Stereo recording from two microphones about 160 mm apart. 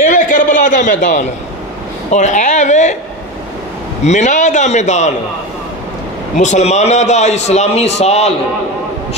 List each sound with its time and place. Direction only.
0.0 s a sound: 55° left (ahead or behind)
2.0 s a man's voice: 45° left (ahead or behind)
4.0 s a man's voice: 45° left (ahead or behind)
6.3 s a man's voice: 45° left (ahead or behind)